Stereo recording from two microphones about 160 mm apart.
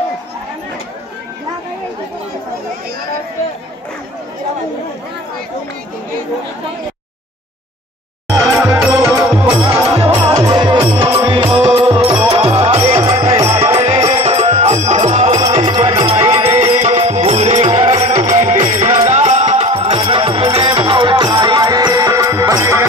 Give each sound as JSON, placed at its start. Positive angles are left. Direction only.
{"t": 8.3, "sound": "music", "side_deg": -20}
{"t": 9.8, "sound": "music", "side_deg": -40}
{"t": 10.1, "sound": "music", "side_deg": -20}
{"t": 13.3, "sound": "music", "side_deg": -20}
{"t": 13.6, "sound": "music", "side_deg": -35}
{"t": 15.3, "sound": "music", "side_deg": -25}